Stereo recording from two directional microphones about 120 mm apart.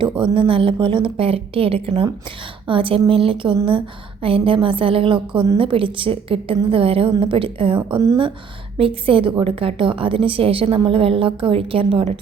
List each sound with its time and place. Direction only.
0.0 s a woman's voice: 45° right (ahead or behind)
9.0 s a woman's voice: 45° right (ahead or behind)